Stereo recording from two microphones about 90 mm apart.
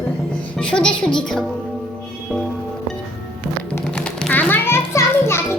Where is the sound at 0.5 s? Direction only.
10° left (ahead or behind).